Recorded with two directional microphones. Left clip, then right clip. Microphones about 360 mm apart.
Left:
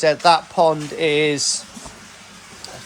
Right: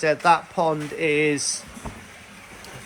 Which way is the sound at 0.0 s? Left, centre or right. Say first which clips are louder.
Left 4 dB; centre.